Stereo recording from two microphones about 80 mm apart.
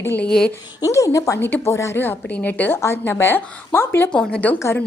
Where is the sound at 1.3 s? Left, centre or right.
Left.